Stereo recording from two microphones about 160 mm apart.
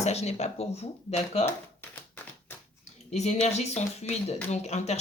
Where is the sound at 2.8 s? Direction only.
45° left (ahead or behind).